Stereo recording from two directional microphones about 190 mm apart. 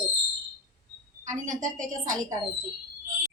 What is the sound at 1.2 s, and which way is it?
Speech, 40° right (ahead or behind).